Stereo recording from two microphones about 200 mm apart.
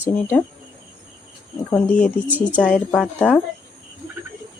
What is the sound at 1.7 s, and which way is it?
Speech, 5° left (ahead or behind).